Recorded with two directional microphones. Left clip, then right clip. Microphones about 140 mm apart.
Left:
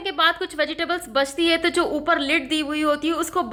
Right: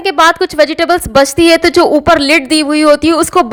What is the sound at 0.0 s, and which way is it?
A woman's voice, 65° right (ahead or behind).